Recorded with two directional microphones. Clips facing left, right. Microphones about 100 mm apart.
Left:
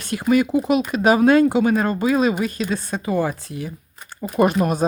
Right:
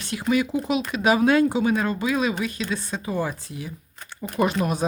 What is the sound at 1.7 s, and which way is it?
Speech, 45° left (ahead or behind).